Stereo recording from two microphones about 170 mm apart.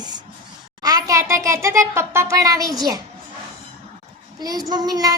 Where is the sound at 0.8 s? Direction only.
20° right (ahead or behind).